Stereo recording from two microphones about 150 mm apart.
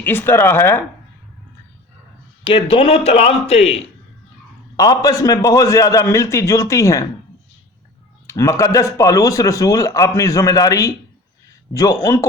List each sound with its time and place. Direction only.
0.0 s speech: 15° left (ahead or behind)
2.4 s a man's voice: 35° left (ahead or behind)
4.8 s speech: 25° left (ahead or behind)
8.3 s speech: 20° left (ahead or behind)